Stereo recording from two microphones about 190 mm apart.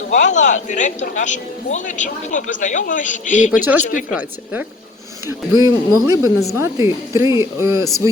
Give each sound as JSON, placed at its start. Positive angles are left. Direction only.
{"t": 0.1, "sound": "speech", "side_deg": 40}
{"t": 3.5, "sound": "speech", "side_deg": -10}
{"t": 3.8, "sound": "speech", "side_deg": 45}
{"t": 4.1, "sound": "speech", "side_deg": -5}